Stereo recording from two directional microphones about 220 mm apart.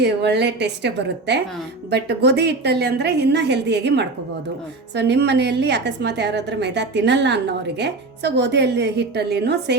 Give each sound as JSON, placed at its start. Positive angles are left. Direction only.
{"t": 0.0, "sound": "a woman's voice", "side_deg": -50}